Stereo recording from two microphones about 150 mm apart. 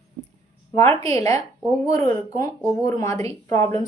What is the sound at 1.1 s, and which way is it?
A woman's voice, 20° left (ahead or behind).